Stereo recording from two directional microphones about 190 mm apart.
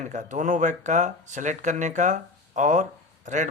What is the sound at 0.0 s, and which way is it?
Speech, 40° right (ahead or behind).